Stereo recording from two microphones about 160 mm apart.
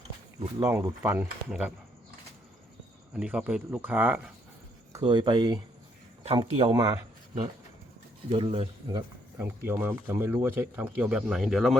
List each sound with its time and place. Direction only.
0.6 s speech: 15° right (ahead or behind)
3.2 s speech: 5° right (ahead or behind)
4.9 s speech: 30° right (ahead or behind)
8.3 s speech: 40° right (ahead or behind)
9.4 s speech: 10° right (ahead or behind)